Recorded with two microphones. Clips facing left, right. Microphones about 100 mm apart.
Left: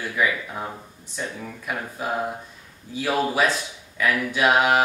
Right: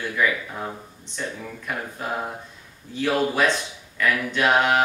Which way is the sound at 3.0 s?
5° left (ahead or behind).